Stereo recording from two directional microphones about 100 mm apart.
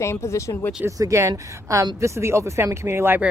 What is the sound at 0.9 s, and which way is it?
Speech, 35° right (ahead or behind).